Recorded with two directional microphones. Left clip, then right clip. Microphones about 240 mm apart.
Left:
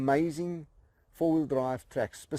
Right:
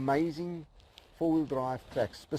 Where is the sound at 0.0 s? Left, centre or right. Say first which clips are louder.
Left 2 dB; left.